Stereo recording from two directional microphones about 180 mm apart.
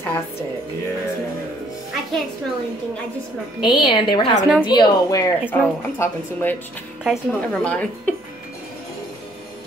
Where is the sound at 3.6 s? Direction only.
25° left (ahead or behind).